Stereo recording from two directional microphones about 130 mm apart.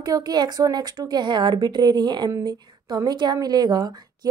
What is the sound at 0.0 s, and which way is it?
A woman's voice, 30° right (ahead or behind).